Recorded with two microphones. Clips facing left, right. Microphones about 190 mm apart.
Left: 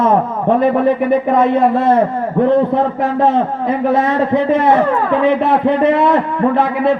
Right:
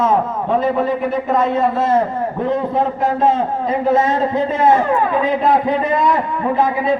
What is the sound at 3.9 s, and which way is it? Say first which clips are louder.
A man's voice: left 1 dB; 65° left (ahead or behind).